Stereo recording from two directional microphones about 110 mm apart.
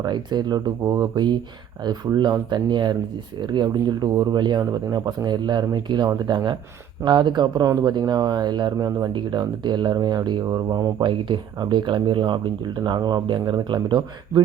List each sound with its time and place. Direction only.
0.0 s speech: 40° right (ahead or behind)